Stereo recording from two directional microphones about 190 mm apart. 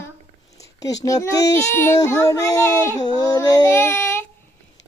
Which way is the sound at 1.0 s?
15° left (ahead or behind).